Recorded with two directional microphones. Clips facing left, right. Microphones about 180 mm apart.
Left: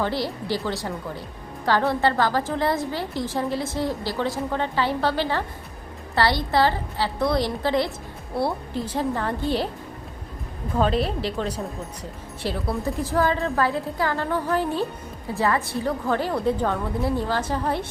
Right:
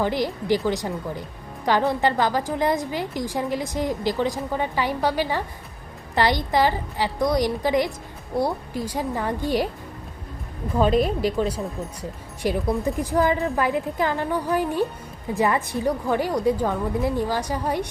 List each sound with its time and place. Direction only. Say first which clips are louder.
0.0 s a woman's voice: right 2 dB; 15° right (ahead or behind)
11.2 s a woman's voice: right 4 dB; 10° right (ahead or behind)